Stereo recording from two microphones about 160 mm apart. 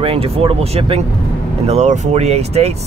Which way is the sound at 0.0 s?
35° right (ahead or behind).